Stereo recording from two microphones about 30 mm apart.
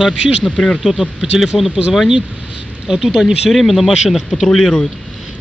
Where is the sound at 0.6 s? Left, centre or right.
Left.